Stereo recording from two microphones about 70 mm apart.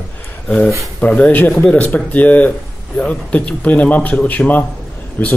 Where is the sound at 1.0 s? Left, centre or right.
Left.